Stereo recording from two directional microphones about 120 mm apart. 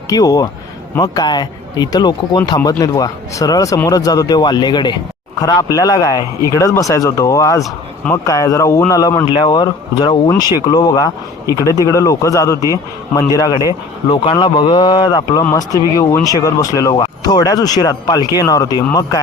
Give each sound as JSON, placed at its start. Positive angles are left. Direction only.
{"t": 0.1, "sound": "speech", "side_deg": 30}
{"t": 9.2, "sound": "speech", "side_deg": 40}